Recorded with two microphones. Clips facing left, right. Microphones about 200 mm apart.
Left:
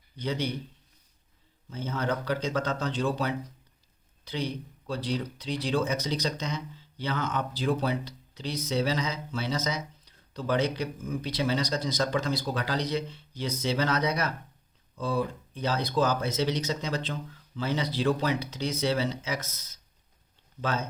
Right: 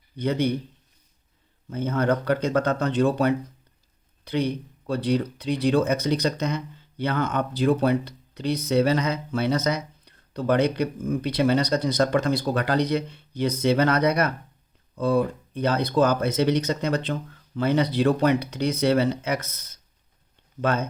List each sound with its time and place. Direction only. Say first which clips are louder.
0.2 s speech: right 7 dB; 55° right (ahead or behind)
1.7 s speech: right 7 dB; 55° right (ahead or behind)